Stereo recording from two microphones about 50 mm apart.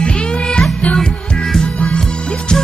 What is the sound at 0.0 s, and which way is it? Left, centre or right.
Music, left.